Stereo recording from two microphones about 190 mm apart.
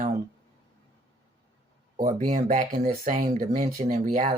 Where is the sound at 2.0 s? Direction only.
40° right (ahead or behind).